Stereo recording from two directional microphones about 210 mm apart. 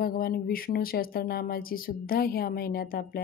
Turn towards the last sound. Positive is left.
turn(degrees=45)  # may be behind; listen again after turning